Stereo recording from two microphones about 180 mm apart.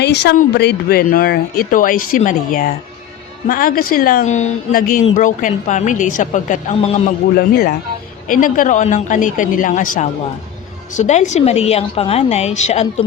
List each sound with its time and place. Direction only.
0.0 s speech: 70° left (ahead or behind); by 6.7 s 45° left (ahead or behind)
7.3 s speech: 60° left (ahead or behind)
8.3 s a woman's voice: 50° left (ahead or behind)